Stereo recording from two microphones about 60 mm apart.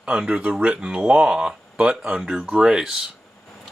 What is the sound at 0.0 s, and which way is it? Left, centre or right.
Speech, centre.